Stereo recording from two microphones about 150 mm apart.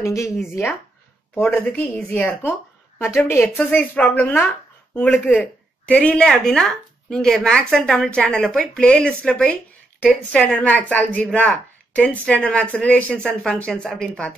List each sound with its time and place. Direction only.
0.0 s speech: 20° left (ahead or behind)